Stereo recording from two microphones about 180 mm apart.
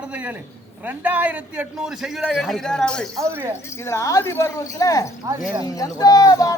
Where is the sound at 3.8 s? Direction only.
15° left (ahead or behind).